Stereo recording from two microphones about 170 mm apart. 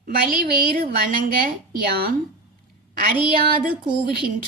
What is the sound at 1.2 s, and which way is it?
Speech, 55° right (ahead or behind).